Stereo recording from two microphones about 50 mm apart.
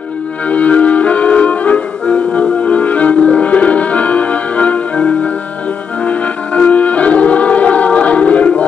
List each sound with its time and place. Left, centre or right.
0.5 s music: left